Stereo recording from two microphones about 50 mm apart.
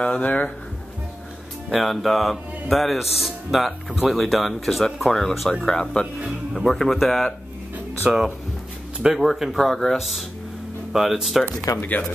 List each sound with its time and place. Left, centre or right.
0.0 s speech: left
1.7 s speech: centre
8.0 s speech: right
9.1 s speech: centre